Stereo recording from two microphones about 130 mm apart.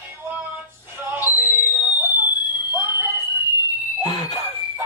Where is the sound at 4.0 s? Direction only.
35° left (ahead or behind).